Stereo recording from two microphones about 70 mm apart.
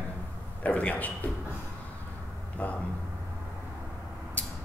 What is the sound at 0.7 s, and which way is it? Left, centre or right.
Speech, left.